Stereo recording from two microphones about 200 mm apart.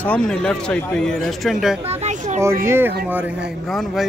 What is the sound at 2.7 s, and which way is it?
Speech, 10° right (ahead or behind).